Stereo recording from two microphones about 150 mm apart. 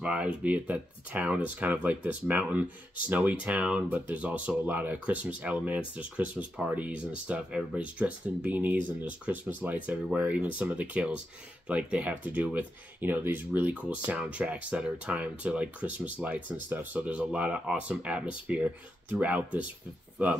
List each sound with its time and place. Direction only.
0.0 s speech: 10° right (ahead or behind)